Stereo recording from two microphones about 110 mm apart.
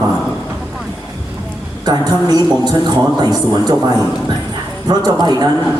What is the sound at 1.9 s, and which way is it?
A man's voice, 40° right (ahead or behind).